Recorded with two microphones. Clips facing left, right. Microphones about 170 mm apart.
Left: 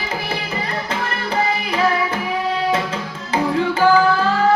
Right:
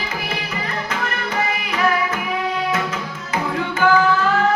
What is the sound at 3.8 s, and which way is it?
Music, 35° left (ahead or behind).